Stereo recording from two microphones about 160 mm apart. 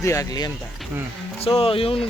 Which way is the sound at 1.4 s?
35° left (ahead or behind).